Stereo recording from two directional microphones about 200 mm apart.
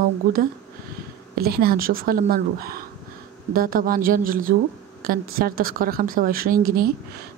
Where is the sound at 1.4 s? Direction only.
50° right (ahead or behind).